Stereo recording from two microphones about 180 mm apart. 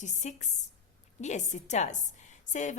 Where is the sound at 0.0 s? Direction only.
40° left (ahead or behind).